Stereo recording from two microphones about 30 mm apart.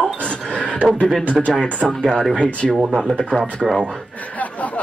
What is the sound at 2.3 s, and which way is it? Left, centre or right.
Speech, left.